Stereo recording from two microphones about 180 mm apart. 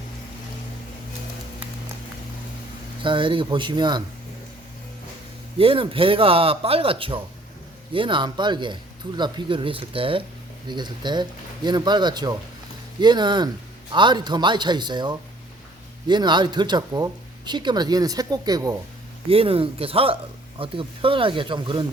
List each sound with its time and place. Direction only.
3.0 s speech: 30° right (ahead or behind)
5.5 s a man's voice: 30° right (ahead or behind)
19.3 s a man's voice: 30° right (ahead or behind)